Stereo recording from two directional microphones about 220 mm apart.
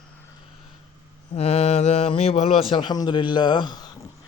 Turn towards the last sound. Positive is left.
turn(degrees=20)  # may be behind; listen again after turning